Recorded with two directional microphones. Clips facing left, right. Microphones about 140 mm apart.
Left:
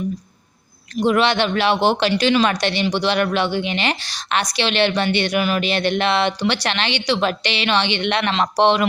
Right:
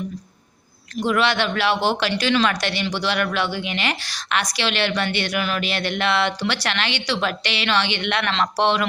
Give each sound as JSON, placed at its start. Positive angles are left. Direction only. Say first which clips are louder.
{"t": 0.9, "sound": "a woman's voice", "louder": "left 3 dB", "side_deg": 20}